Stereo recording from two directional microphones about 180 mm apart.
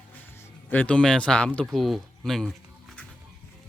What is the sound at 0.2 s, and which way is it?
Speech, 15° left (ahead or behind).